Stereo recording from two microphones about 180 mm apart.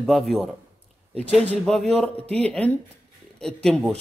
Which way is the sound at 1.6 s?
5° left (ahead or behind).